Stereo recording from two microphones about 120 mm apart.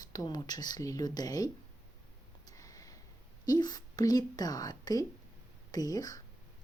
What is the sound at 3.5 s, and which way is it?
Speech, 35° left (ahead or behind).